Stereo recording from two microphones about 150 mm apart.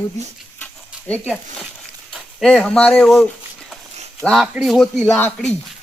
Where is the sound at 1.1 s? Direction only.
5° left (ahead or behind).